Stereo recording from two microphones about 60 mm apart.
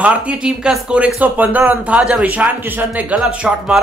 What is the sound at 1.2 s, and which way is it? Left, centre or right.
Speech, right.